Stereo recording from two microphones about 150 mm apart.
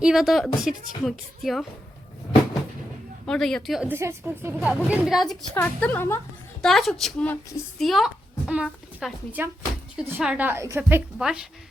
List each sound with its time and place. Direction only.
0.0 s a woman's voice: 5° right (ahead or behind)
3.2 s a woman's voice: 5° left (ahead or behind)
3.8 s a woman's voice: 15° right (ahead or behind)
4.6 s a woman's voice: 5° right (ahead or behind); by 6.1 s 10° left (ahead or behind)
6.6 s a woman's voice: centre (ahead or behind)